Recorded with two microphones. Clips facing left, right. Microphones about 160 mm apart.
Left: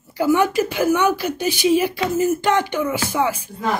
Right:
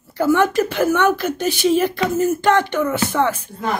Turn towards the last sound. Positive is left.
turn(degrees=10)  # may be behind; listen again after turning